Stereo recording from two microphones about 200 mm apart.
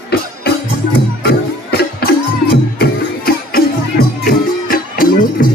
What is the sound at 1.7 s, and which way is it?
Music, 50° left (ahead or behind).